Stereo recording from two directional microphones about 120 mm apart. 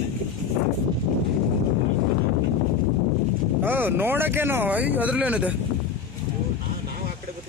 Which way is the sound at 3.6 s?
15° right (ahead or behind).